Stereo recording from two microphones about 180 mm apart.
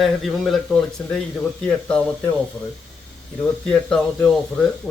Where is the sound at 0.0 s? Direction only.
Centre (ahead or behind).